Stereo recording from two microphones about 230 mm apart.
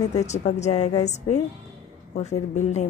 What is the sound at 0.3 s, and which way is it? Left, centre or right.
A woman's voice, left.